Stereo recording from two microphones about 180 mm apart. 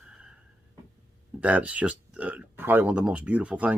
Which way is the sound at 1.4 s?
10° right (ahead or behind).